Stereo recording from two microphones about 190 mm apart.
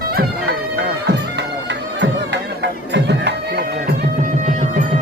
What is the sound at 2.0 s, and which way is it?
Music, 65° right (ahead or behind).